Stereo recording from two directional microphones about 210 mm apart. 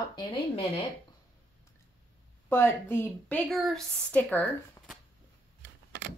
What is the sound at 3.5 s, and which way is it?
Speech, centre (ahead or behind).